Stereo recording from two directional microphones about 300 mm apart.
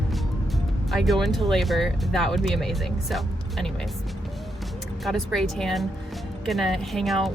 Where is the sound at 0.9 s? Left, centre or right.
Centre.